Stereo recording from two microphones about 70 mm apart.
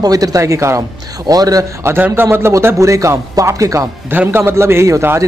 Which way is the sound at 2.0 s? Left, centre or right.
Right.